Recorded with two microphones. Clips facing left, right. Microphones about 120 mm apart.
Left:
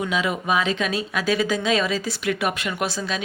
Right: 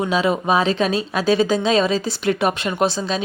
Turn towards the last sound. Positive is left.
turn(degrees=-30)  # may be behind; listen again after turning